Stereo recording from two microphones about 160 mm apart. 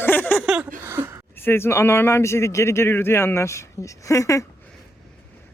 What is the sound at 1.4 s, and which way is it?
Speech, 15° left (ahead or behind).